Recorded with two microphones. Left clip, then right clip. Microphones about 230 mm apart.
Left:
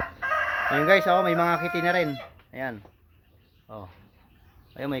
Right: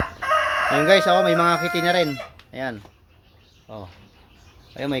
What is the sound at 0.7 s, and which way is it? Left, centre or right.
Speech, centre.